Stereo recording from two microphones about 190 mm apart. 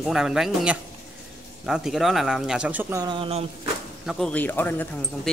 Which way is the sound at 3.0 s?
25° right (ahead or behind).